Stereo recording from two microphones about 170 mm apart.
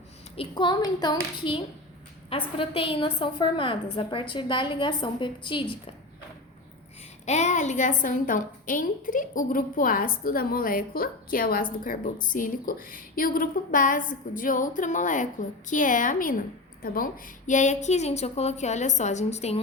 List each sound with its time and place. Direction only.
0.3 s a woman's voice: 25° left (ahead or behind)
7.3 s a woman's voice: 40° left (ahead or behind)